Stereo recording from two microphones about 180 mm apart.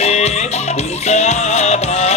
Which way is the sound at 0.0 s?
40° left (ahead or behind).